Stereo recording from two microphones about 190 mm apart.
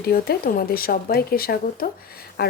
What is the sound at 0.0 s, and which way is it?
Speech, 55° left (ahead or behind).